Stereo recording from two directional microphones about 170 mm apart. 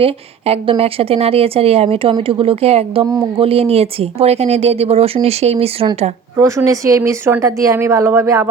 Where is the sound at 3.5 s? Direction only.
35° right (ahead or behind).